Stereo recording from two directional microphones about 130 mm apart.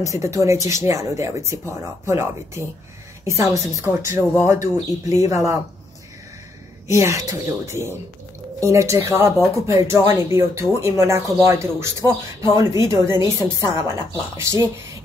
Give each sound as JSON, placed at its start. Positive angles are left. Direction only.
{"t": 0.0, "sound": "speech", "side_deg": -25}
{"t": 6.9, "sound": "speech", "side_deg": -25}